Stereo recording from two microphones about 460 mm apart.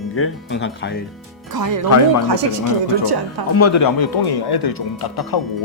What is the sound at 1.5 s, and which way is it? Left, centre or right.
Speech, right.